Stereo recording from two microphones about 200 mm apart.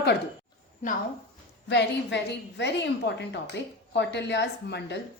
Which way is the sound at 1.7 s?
60° left (ahead or behind).